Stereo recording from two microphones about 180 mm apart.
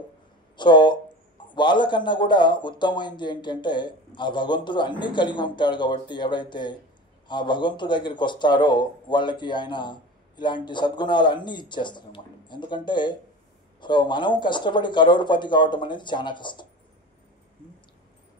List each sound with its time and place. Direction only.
0.6 s a man's voice: 25° left (ahead or behind)